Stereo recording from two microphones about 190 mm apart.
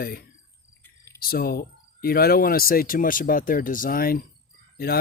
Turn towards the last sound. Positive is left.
turn(degrees=55)  # may be behind; listen again after turning